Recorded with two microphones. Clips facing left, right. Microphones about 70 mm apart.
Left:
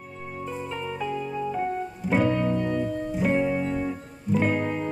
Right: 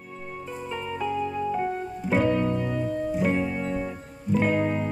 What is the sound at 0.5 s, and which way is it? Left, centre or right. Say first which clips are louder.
Music: even; centre.